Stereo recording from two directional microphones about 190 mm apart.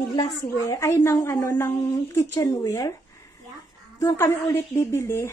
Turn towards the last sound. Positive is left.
turn(degrees=15)  # may be behind; listen again after turning